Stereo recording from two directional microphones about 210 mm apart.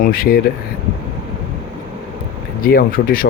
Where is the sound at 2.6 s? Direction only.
45° left (ahead or behind).